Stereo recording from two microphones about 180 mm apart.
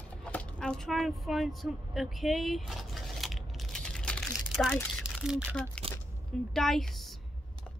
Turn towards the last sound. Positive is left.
turn(degrees=0)  # may be behind; listen again after turning